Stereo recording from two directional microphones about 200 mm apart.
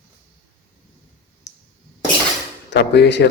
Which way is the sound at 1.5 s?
60° left (ahead or behind).